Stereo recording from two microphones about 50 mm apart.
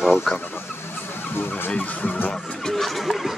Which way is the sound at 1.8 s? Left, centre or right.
Left.